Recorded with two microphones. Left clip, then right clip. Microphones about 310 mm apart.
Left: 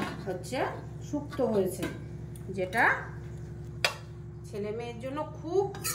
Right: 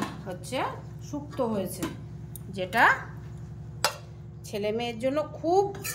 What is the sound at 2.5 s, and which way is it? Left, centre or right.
Speech, right.